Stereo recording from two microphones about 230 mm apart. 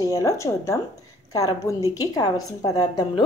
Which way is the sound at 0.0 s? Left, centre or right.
Centre.